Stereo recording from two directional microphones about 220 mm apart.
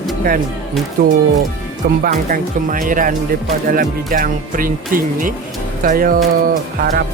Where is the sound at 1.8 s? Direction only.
45° right (ahead or behind).